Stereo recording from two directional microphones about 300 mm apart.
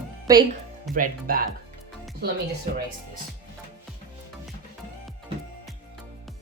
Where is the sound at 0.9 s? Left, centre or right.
Right.